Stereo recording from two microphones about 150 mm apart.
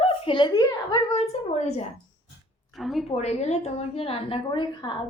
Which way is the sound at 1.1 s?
45° left (ahead or behind).